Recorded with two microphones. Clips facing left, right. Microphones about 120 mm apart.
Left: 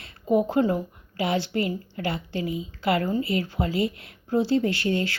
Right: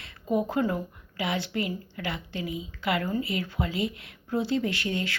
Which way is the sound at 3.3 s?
30° left (ahead or behind).